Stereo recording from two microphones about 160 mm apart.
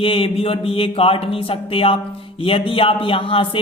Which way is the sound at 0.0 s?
35° left (ahead or behind).